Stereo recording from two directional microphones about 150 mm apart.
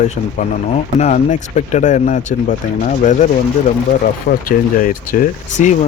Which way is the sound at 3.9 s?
70° left (ahead or behind).